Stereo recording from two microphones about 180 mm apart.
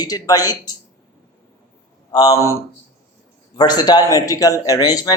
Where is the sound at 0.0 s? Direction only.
20° left (ahead or behind).